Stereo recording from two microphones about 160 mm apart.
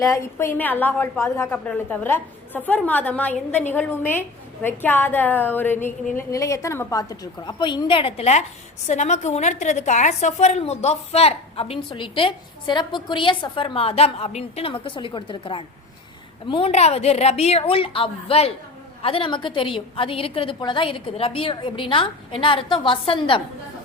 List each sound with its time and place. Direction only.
0.0 s a woman's voice: 15° left (ahead or behind); by 23.4 s 35° left (ahead or behind)